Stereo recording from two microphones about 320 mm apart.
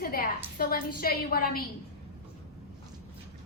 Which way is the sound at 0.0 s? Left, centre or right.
Left.